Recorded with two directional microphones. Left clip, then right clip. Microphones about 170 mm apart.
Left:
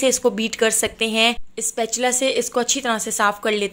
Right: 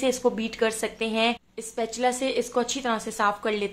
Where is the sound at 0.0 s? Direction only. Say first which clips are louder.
Left 6 dB; 20° left (ahead or behind).